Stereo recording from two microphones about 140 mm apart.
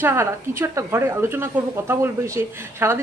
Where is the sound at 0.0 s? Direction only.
20° right (ahead or behind).